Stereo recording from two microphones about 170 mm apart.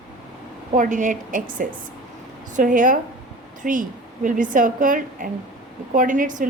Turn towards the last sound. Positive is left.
turn(degrees=-50)  # may be behind; listen again after turning